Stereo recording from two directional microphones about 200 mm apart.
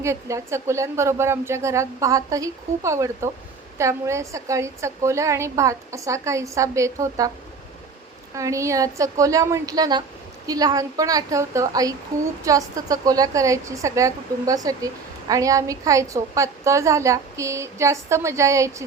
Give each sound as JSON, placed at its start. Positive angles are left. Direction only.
{"t": 0.0, "sound": "a woman's voice", "side_deg": -15}
{"t": 8.4, "sound": "a woman's voice", "side_deg": -15}